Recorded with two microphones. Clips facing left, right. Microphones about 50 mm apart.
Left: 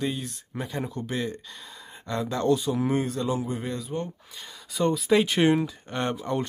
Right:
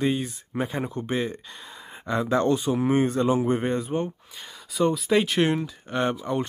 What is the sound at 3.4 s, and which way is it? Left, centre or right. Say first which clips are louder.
Speech: right 7 dB; right.